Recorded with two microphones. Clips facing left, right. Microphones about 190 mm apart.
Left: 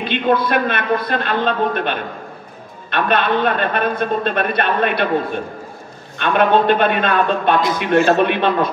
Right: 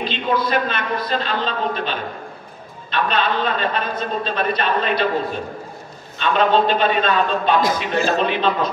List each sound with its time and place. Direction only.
0.0 s a man's voice: 60° left (ahead or behind)